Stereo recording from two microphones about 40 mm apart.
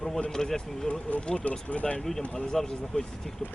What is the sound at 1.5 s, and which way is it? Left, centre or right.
Speech, left.